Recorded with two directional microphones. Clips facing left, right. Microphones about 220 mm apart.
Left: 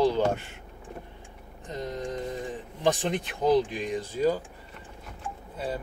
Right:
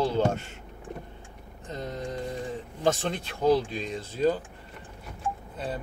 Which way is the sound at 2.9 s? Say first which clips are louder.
Left 1 dB; 15° left (ahead or behind).